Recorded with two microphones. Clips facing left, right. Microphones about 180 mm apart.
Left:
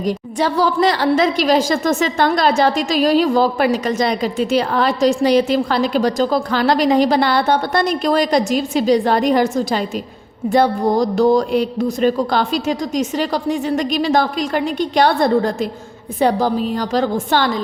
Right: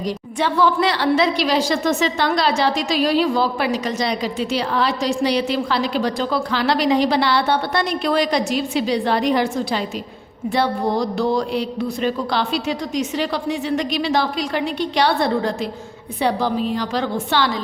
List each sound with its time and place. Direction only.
0.0 s a woman's voice: 40° left (ahead or behind)